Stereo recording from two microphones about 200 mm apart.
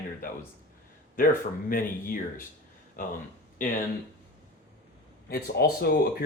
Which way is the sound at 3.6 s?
40° left (ahead or behind).